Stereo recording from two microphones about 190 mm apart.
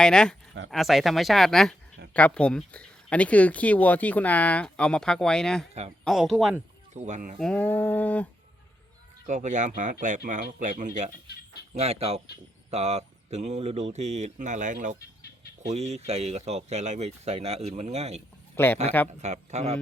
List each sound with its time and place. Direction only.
0.0 s speech: 5° left (ahead or behind)
6.9 s speech: 40° right (ahead or behind)
7.3 s speech: 5° left (ahead or behind)
9.2 s speech: 40° right (ahead or behind)
18.5 s a man's voice: 10° left (ahead or behind)
19.2 s speech: 35° right (ahead or behind)